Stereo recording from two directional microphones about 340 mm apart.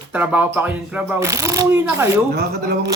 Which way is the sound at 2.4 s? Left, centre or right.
Right.